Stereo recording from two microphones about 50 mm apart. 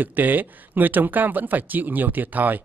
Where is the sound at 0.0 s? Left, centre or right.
Right.